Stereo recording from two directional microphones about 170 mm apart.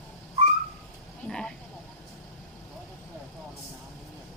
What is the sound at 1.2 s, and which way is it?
Sheep, 5° left (ahead or behind).